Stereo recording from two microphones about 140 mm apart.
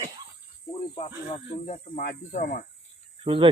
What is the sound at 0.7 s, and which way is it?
Cricket, 40° left (ahead or behind).